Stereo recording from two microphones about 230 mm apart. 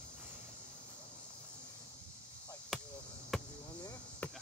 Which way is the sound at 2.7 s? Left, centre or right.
Centre.